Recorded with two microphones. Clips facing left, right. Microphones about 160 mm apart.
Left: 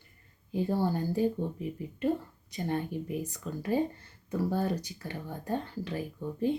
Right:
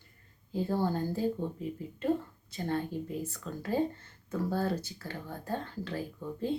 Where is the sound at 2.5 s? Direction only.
15° left (ahead or behind).